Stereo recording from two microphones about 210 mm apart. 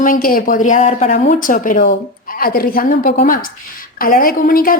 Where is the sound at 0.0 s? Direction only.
40° left (ahead or behind).